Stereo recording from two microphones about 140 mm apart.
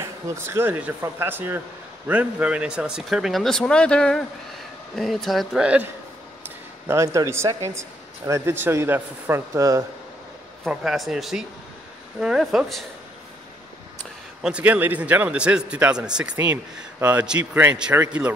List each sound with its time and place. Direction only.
0.0 s speech: 20° right (ahead or behind)
6.9 s speech: 20° right (ahead or behind)
10.6 s speech: 5° right (ahead or behind)
14.4 s speech: 10° right (ahead or behind)